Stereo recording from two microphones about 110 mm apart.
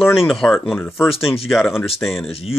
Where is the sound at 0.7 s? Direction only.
20° left (ahead or behind).